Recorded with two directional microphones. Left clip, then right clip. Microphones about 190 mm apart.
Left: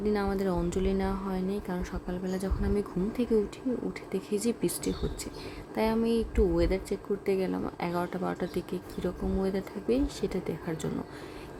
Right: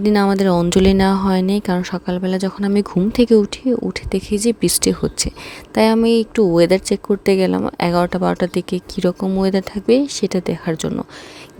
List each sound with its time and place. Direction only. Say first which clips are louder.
0.0 s speech: right 13 dB; 60° right (ahead or behind)